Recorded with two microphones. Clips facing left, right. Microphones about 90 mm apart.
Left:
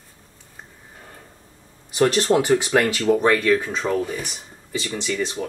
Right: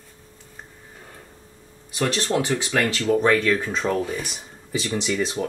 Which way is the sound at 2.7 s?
15° left (ahead or behind).